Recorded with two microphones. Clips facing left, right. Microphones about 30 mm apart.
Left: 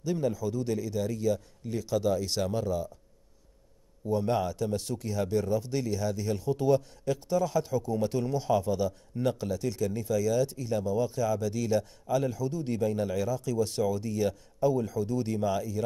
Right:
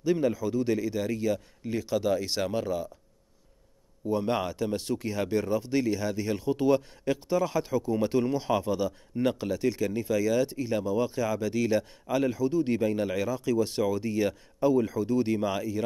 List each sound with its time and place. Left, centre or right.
0.0 s speech: right
4.0 s speech: right